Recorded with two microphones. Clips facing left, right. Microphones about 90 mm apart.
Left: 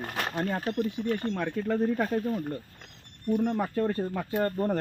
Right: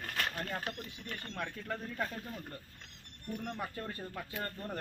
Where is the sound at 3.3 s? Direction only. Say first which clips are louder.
Left 13 dB; 80° left.